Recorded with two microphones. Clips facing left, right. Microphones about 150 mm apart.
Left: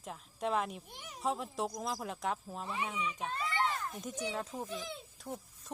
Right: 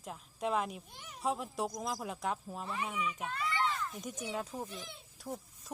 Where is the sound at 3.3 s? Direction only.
30° left (ahead or behind).